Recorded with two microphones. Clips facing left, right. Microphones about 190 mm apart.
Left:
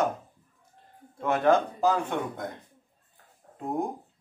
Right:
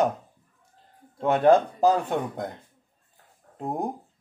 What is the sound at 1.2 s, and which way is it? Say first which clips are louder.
A man's voice: right 4 dB; 30° right (ahead or behind).